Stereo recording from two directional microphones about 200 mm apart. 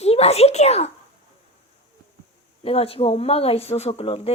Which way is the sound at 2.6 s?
30° left (ahead or behind).